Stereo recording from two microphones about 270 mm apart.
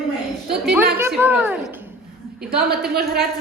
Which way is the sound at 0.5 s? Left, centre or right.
Centre.